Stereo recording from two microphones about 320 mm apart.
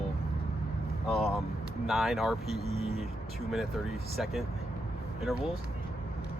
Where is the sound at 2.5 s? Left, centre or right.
Centre.